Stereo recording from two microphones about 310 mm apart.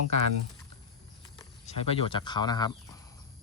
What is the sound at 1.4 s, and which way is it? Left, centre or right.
Speech, centre.